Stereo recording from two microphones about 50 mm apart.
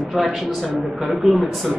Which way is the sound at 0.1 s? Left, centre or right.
Centre.